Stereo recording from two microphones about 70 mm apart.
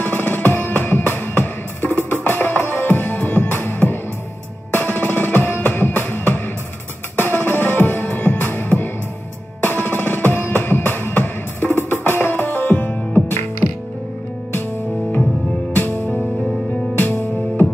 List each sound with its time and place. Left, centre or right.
0.0 s music: left
15.7 s music: left